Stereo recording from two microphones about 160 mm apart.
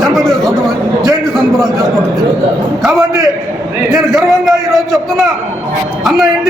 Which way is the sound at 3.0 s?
20° right (ahead or behind).